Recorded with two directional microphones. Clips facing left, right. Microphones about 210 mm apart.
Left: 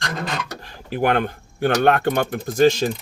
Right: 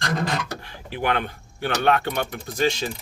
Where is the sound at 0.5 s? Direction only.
40° left (ahead or behind).